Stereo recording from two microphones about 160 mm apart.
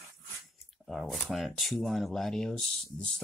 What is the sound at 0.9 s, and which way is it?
Speech, centre (ahead or behind).